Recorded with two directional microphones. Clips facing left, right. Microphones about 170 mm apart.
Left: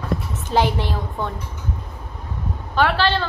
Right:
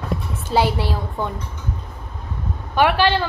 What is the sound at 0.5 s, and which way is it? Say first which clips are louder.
Speech: right 1 dB; 10° right (ahead or behind).